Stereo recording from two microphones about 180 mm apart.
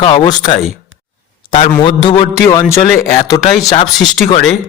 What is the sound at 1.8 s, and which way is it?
Speech, 30° left (ahead or behind).